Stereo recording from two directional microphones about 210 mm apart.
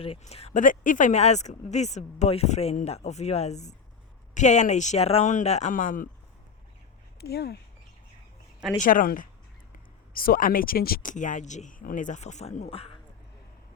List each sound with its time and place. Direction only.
0.0 s speech: 30° left (ahead or behind)
7.2 s speech: 50° left (ahead or behind)
8.8 s speech: 40° left (ahead or behind)